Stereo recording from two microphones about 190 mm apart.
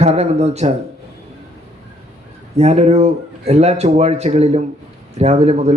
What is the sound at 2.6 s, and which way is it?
Speech, 35° right (ahead or behind).